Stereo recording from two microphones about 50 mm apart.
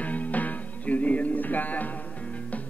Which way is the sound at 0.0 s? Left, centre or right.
Left.